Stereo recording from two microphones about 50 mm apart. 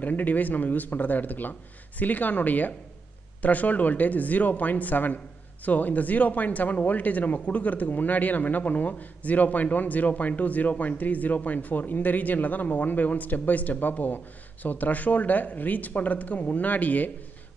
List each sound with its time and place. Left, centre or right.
0.0 s speech: left